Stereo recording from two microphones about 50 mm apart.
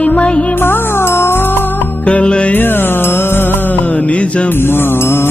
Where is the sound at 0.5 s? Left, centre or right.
Left.